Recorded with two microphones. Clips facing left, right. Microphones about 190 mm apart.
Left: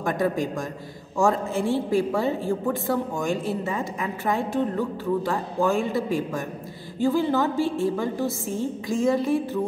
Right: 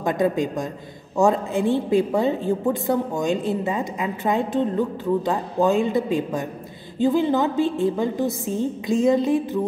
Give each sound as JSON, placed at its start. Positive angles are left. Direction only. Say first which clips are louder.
{"t": 0.0, "sound": "a woman's voice", "louder": "right 3 dB", "side_deg": -20}